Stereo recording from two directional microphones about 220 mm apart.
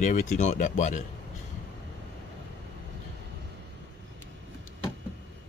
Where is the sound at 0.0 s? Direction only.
35° left (ahead or behind).